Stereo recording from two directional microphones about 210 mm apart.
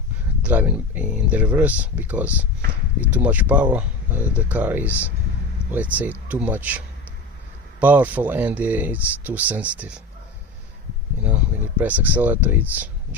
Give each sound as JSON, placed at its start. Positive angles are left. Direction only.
{"t": 0.4, "sound": "speech", "side_deg": -5}
{"t": 11.8, "sound": "speech", "side_deg": -10}